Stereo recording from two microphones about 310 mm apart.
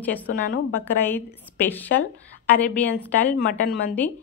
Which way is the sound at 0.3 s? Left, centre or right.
Left.